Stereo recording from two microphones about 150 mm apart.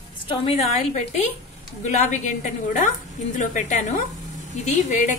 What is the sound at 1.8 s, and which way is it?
A woman's voice, 55° left (ahead or behind).